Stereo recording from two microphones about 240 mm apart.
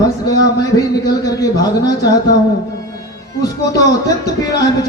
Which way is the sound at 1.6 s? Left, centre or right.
Centre.